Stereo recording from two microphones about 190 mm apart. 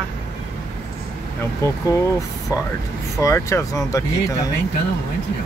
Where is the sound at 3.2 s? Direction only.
15° left (ahead or behind).